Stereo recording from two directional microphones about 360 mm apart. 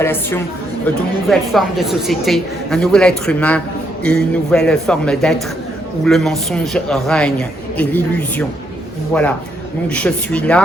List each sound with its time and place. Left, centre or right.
0.0 s a woman's voice: centre